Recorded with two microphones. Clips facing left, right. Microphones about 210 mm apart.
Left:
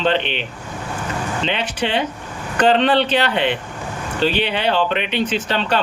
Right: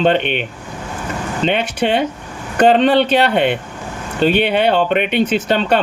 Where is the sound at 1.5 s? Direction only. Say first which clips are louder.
Right 7 dB; 50° right (ahead or behind).